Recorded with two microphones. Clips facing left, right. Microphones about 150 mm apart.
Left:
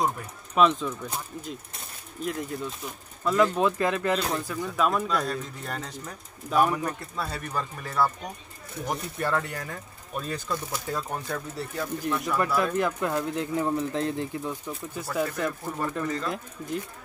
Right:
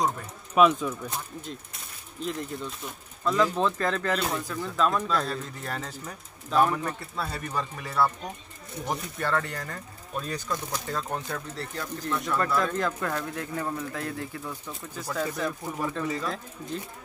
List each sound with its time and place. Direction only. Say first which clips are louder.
0.6 s speech: right 1 dB; 5° right (ahead or behind); by 4.2 s 15° left (ahead or behind)
4.2 s speech: left 1 dB; centre (ahead or behind); by 15.0 s 20° left (ahead or behind)
15.3 s speech: left 1 dB; 5° left (ahead or behind)